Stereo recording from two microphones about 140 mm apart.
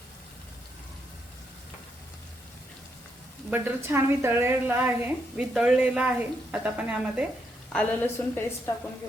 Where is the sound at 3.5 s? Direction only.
15° right (ahead or behind).